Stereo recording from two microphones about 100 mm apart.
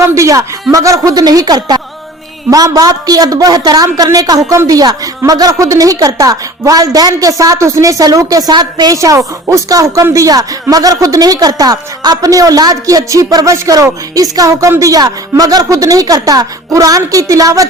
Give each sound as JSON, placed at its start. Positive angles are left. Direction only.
{"t": 0.0, "sound": "speech", "side_deg": -30}
{"t": 9.0, "sound": "speech", "side_deg": -30}